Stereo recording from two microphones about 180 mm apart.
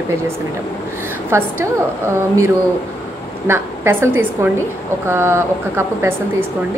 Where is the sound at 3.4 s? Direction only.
15° right (ahead or behind).